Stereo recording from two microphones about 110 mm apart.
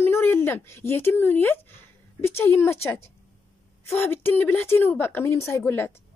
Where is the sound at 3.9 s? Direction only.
20° left (ahead or behind).